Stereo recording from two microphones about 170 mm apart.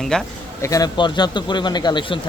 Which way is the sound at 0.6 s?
20° left (ahead or behind).